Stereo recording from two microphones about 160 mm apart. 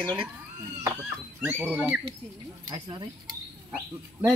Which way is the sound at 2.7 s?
25° right (ahead or behind).